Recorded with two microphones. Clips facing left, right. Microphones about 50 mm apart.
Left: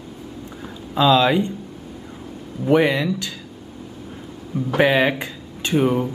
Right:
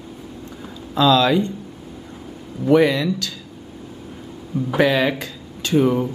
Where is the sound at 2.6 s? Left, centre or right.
Centre.